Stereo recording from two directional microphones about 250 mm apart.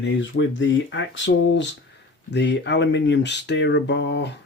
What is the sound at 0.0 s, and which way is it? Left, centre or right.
Speech, left.